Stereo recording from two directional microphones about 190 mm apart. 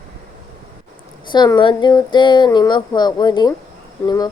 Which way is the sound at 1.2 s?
25° left (ahead or behind).